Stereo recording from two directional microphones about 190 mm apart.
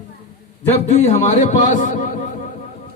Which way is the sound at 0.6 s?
35° left (ahead or behind).